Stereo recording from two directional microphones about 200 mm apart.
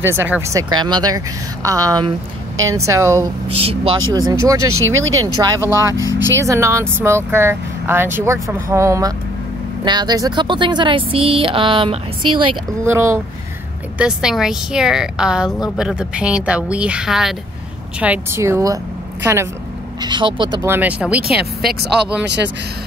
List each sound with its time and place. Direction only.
0.0 s speech: 10° right (ahead or behind)
3.5 s speech: 30° right (ahead or behind)
4.6 s speech: 90° right
5.2 s speech: 20° right (ahead or behind)
12.2 s speech: 90° right
12.8 s speech: 15° right (ahead or behind)
20.0 s speech: 25° right (ahead or behind)
20.6 s speech: 10° right (ahead or behind)
22.2 s speech: 60° right (ahead or behind)